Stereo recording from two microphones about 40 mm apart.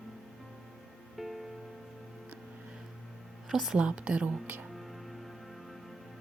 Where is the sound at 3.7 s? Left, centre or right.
Right.